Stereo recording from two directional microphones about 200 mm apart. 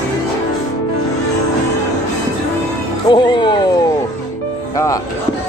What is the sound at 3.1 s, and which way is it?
Speech, 25° left (ahead or behind).